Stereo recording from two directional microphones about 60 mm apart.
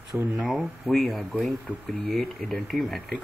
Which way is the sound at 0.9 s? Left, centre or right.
Centre.